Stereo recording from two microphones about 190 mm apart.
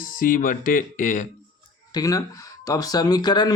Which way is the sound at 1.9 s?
20° left (ahead or behind).